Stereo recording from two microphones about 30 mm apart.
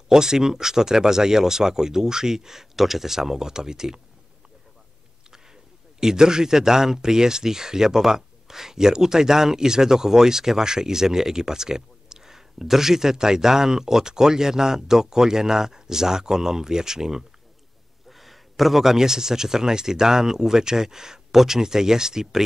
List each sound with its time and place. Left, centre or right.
0.1 s speech: centre
5.9 s speech: right
18.1 s a sound: centre
18.9 s speech: centre